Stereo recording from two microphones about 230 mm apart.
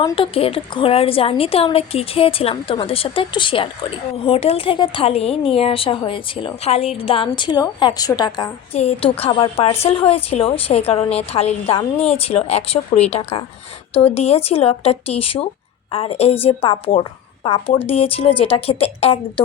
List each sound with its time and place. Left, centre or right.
0.0 s speech: left